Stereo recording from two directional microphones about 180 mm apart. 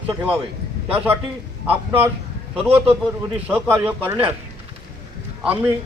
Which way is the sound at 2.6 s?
10° right (ahead or behind).